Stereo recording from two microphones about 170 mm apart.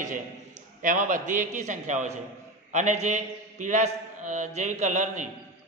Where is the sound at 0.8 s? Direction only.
50° right (ahead or behind).